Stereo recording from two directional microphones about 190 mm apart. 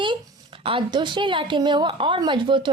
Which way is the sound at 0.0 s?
25° right (ahead or behind).